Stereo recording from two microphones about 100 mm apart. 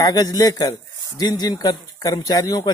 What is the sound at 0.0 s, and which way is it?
Speech, 40° left (ahead or behind).